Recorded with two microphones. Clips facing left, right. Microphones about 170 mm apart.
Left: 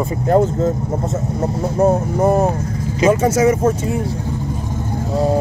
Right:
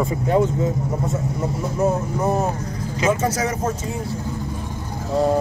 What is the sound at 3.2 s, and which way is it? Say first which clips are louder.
Speech: left 7 dB; 25° left (ahead or behind).